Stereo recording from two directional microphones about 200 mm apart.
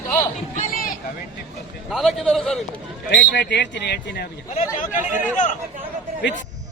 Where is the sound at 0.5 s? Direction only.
45° left (ahead or behind).